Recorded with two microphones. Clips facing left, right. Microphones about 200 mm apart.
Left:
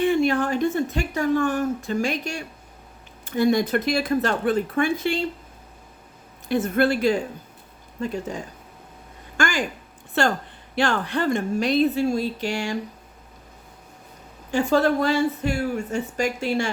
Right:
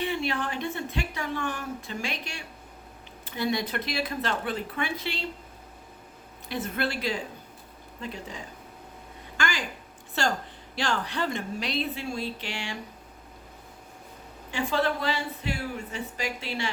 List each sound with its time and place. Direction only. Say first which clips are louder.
0.0 s a woman's voice: left 9 dB; 45° left (ahead or behind)
6.5 s a woman's voice: left 10 dB; 50° left (ahead or behind)
9.4 s a woman's voice: left 7 dB; 50° left (ahead or behind)
14.5 s a woman's voice: left 8 dB; 45° left (ahead or behind)